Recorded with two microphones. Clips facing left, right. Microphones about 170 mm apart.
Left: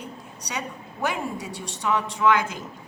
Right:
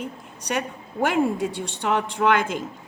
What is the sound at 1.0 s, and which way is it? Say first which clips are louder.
A woman's voice: right 7 dB; 55° right (ahead or behind).